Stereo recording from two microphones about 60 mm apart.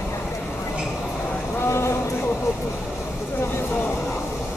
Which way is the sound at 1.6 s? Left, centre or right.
Left.